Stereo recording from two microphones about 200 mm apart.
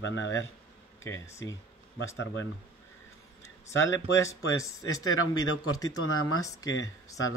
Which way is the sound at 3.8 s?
70° left (ahead or behind).